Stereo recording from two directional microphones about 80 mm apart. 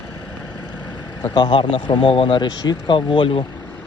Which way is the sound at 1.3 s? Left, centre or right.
Left.